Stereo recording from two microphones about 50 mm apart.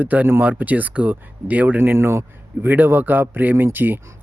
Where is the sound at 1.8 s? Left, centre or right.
Right.